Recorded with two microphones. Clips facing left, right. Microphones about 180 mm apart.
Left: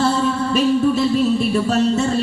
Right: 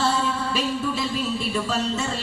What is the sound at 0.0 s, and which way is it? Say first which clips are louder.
Music: left 6 dB; 50° left (ahead or behind).